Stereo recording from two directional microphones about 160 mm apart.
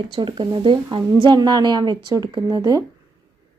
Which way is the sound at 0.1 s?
30° right (ahead or behind).